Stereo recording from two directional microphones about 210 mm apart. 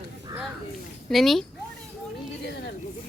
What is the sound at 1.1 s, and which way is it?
Speech, centre (ahead or behind).